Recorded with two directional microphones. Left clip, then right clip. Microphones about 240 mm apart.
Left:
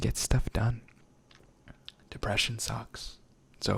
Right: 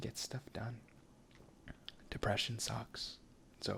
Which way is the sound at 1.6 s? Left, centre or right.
Centre.